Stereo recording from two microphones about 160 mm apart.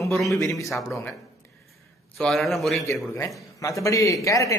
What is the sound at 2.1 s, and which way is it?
Speech, centre (ahead or behind).